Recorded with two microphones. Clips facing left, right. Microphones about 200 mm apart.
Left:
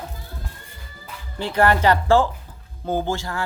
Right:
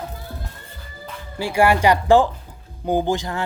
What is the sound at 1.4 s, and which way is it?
Speech, 10° right (ahead or behind).